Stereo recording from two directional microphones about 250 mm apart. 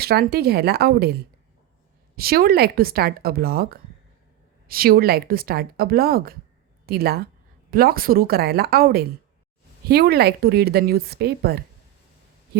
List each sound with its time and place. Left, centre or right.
0.0 s speech: right
2.1 s speech: right